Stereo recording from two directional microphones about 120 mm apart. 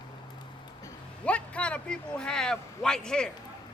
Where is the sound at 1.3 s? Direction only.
10° left (ahead or behind).